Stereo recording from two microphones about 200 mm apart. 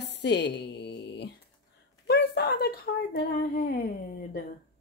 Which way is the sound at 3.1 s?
45° left (ahead or behind).